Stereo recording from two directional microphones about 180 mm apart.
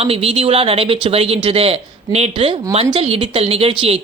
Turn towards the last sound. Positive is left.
turn(degrees=-30)  # may be behind; listen again after turning